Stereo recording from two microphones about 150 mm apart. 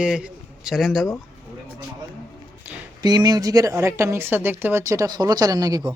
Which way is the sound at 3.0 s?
25° right (ahead or behind).